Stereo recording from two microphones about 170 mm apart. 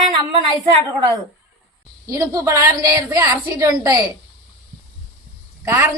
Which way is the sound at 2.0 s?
20° right (ahead or behind).